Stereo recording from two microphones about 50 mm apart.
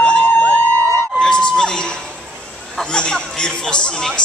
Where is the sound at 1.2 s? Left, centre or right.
Centre.